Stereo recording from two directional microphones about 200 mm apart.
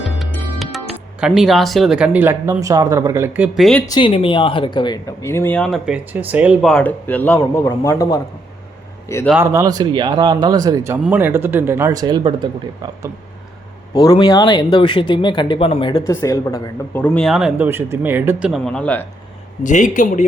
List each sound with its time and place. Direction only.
0.0 s music: centre (ahead or behind)
1.4 s speech: centre (ahead or behind)
3.8 s speech: 20° left (ahead or behind)
9.3 s speech: 10° right (ahead or behind)
13.9 s speech: 20° left (ahead or behind)
19.6 s a man's voice: 40° left (ahead or behind)